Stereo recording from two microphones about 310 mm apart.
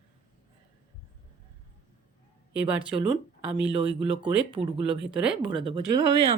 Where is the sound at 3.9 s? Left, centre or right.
Centre.